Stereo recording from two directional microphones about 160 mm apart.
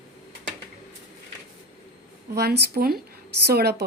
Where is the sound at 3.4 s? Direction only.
90° right.